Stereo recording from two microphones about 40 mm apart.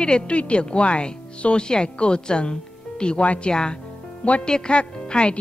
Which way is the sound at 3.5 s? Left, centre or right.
Centre.